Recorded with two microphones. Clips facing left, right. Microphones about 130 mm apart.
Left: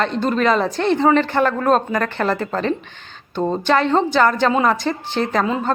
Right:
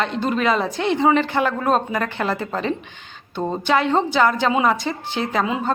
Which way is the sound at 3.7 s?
10° right (ahead or behind).